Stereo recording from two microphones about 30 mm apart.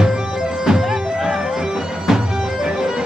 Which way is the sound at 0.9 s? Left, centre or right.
Centre.